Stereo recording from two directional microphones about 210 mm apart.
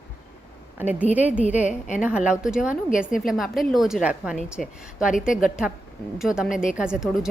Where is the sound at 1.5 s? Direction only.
35° left (ahead or behind).